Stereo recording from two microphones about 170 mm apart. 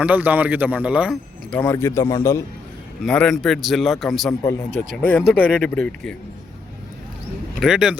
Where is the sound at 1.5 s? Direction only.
10° left (ahead or behind).